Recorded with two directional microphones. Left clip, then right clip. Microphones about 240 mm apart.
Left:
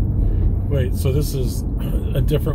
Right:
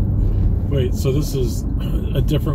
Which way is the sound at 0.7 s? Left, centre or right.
Centre.